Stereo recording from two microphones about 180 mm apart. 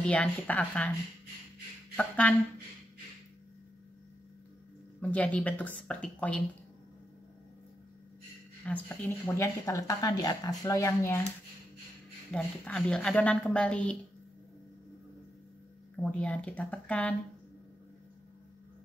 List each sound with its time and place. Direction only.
0.0 s speech: 5° left (ahead or behind)
2.0 s speech: 5° left (ahead or behind)
5.0 s speech: 5° left (ahead or behind)
8.6 s speech: 10° left (ahead or behind)
12.3 s a woman's voice: 5° left (ahead or behind)
16.0 s speech: 5° left (ahead or behind)